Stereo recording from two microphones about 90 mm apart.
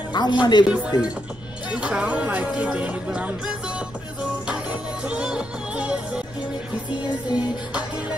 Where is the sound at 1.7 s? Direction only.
10° right (ahead or behind).